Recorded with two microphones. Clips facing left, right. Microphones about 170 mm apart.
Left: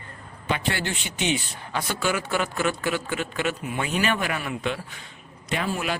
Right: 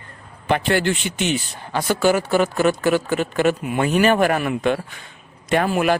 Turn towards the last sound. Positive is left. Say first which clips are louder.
# right 9 dB
turn(degrees=-60)  # may be behind; listen again after turning